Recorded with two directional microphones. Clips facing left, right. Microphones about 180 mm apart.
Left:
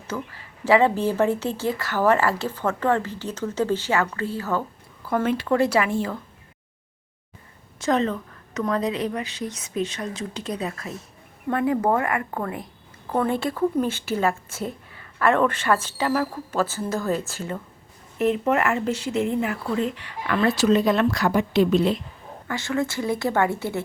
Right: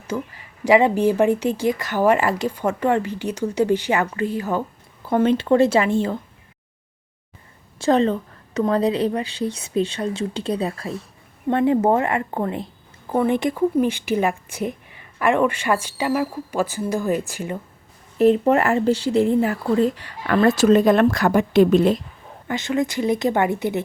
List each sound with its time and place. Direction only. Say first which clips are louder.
0.1 s speech: right 4 dB; 15° right (ahead or behind)
7.8 s speech: right 5 dB; 30° right (ahead or behind)
13.1 s speech: right 4 dB; 15° right (ahead or behind)
18.2 s speech: right 5 dB; 30° right (ahead or behind); by 22.0 s 50° right (ahead or behind)
22.4 s speech: right 3 dB; 20° right (ahead or behind)